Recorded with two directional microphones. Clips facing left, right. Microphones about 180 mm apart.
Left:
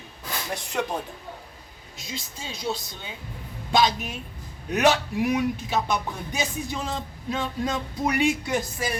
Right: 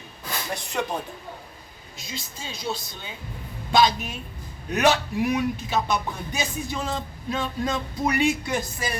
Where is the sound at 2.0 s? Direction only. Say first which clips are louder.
Left 1 dB; 15° left (ahead or behind).